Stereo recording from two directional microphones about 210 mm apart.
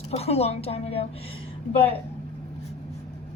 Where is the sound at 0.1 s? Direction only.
30° left (ahead or behind).